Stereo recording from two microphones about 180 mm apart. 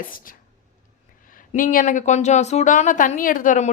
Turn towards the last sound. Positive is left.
turn(degrees=45)  # may be behind; listen again after turning